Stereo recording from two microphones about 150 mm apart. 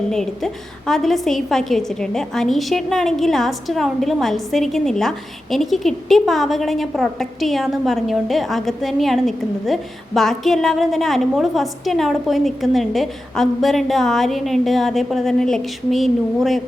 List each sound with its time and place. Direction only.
0.1 s a woman's voice: 5° left (ahead or behind)